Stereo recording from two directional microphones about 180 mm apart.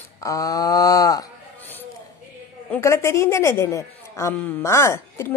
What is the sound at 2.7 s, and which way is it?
Speech, 15° left (ahead or behind).